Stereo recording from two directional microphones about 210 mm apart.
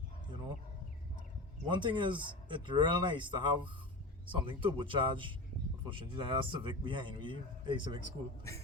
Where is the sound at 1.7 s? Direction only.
20° right (ahead or behind).